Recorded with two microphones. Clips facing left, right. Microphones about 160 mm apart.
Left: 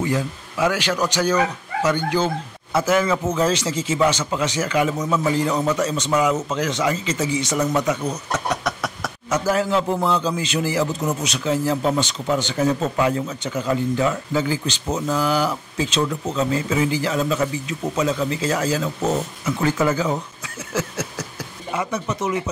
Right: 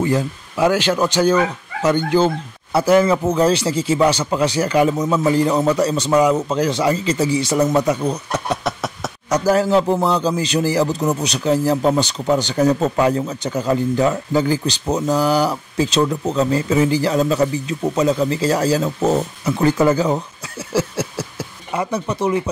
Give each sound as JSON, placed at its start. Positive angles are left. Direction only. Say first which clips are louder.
{"t": 0.0, "sound": "a man's voice", "louder": "right 4 dB", "side_deg": -35}
{"t": 9.3, "sound": "a man's voice", "louder": "right 5 dB", "side_deg": -40}